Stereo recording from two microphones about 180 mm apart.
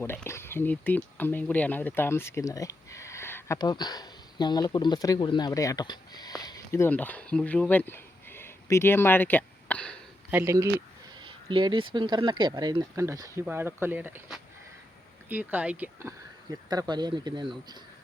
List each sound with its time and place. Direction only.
0.0 s speech: 10° left (ahead or behind)
10.3 s speech: 15° right (ahead or behind)
11.2 s speech: 30° right (ahead or behind)